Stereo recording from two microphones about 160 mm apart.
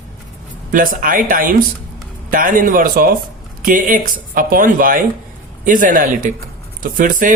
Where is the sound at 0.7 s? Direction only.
60° right (ahead or behind).